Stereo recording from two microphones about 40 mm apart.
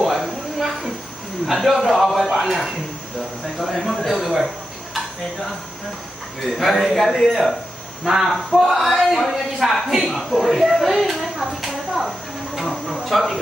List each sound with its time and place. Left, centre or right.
0.0 s a sound: centre
1.5 s speech: centre
2.2 s speech: centre
6.6 s speech: centre
9.3 s speech: centre
10.8 s a sound: centre